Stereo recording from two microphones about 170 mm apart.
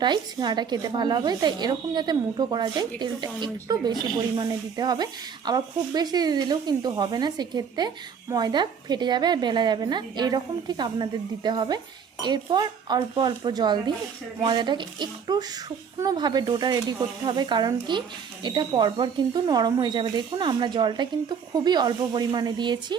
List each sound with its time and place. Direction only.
0.0 s speech: 25° right (ahead or behind)